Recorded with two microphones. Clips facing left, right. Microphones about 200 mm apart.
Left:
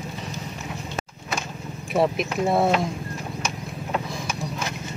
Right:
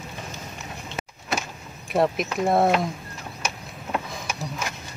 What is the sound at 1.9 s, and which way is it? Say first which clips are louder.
Speech: even; centre (ahead or behind).